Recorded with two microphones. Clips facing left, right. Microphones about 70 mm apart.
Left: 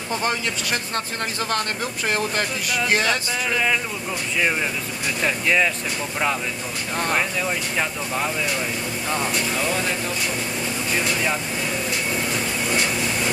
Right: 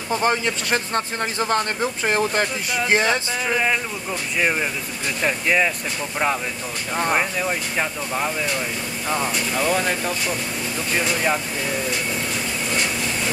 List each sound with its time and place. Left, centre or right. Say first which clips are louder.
0.2 s speech: right 5 dB; right
5.2 s speech: right 1 dB; centre
7.0 s speech: right 2 dB; centre